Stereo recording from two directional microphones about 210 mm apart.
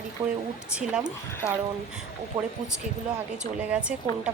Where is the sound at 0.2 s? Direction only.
25° right (ahead or behind).